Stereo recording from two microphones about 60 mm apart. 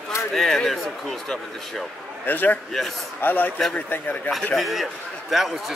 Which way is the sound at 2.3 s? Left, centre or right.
Left.